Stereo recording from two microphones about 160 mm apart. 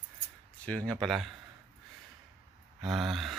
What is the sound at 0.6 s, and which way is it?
Speech, 5° left (ahead or behind).